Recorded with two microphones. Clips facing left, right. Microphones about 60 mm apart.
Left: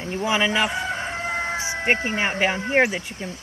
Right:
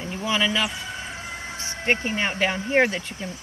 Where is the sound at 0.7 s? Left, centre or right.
Left.